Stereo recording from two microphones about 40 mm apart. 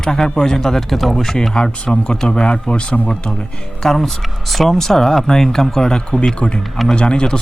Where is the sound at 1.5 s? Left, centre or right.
Left.